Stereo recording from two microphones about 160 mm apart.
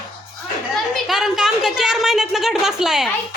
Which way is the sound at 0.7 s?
Centre (ahead or behind).